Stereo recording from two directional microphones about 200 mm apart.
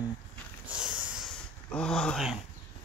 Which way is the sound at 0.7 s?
5° right (ahead or behind).